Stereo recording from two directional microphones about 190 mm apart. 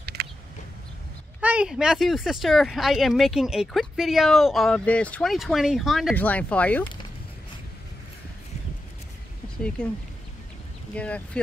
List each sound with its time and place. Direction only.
0.0 s a sound: 60° right (ahead or behind)
1.4 s speech: 5° right (ahead or behind)
11.0 s speech: 5° left (ahead or behind)